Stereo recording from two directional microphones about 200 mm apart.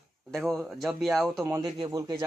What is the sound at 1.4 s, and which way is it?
Speech, 20° right (ahead or behind).